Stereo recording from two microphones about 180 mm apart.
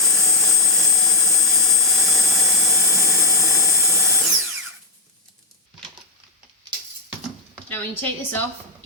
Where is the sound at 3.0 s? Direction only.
15° left (ahead or behind).